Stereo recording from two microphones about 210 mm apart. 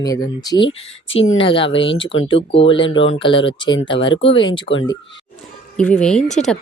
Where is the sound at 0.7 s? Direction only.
65° left (ahead or behind).